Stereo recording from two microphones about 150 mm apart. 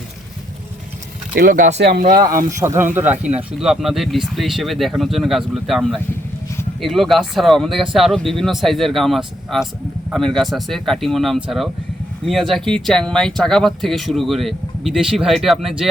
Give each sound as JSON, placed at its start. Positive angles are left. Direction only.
{"t": 1.4, "sound": "speech", "side_deg": -65}
{"t": 2.5, "sound": "speech", "side_deg": -20}